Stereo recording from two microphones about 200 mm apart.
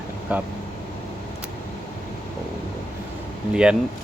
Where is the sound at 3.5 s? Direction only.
5° right (ahead or behind).